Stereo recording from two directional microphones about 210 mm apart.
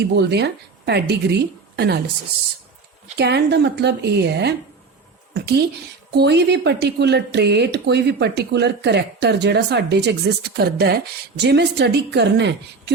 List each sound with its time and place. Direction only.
0.0 s a woman's voice: 50° right (ahead or behind)
3.2 s a woman's voice: 55° right (ahead or behind)